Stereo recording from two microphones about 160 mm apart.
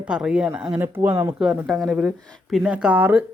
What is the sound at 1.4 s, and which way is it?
Speech, centre (ahead or behind).